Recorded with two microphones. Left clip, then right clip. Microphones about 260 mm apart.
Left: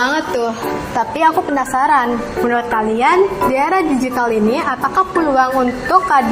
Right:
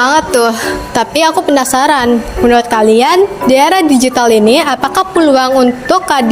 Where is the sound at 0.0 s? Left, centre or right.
Right.